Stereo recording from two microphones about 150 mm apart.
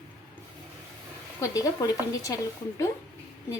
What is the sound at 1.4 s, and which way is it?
Speech, 20° left (ahead or behind).